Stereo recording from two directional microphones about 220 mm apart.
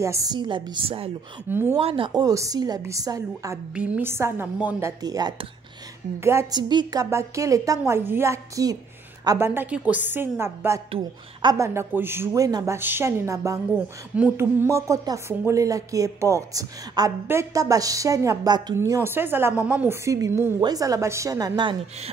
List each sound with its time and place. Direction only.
0.0 s a woman's voice: 15° right (ahead or behind)
1.5 s speech: 10° right (ahead or behind)
1.8 s speech: 25° right (ahead or behind)
10.9 s a woman's voice: 25° right (ahead or behind)
11.5 s speech: 10° right (ahead or behind)